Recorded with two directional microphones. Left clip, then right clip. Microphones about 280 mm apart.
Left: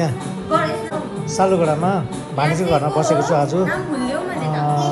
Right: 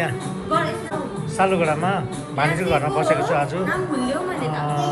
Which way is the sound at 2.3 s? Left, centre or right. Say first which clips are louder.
Left 2 dB; centre.